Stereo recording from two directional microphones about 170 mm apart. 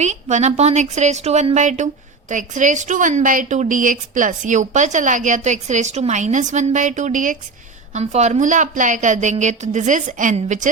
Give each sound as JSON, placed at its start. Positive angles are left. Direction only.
{"t": 0.0, "sound": "a woman's voice", "side_deg": -45}